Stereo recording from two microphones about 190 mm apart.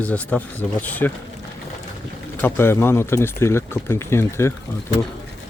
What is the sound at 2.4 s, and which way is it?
Speech, 10° left (ahead or behind).